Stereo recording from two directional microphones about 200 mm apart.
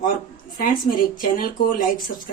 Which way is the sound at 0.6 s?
45° left (ahead or behind).